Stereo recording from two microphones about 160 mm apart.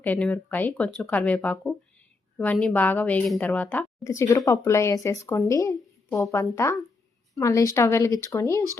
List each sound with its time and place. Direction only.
0.0 s a woman's voice: 10° left (ahead or behind)